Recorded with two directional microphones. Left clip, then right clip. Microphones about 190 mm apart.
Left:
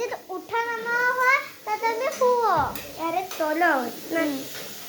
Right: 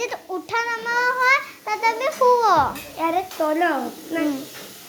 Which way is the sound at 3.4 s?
25° right (ahead or behind).